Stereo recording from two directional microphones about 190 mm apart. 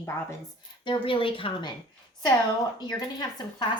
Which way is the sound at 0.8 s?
25° left (ahead or behind).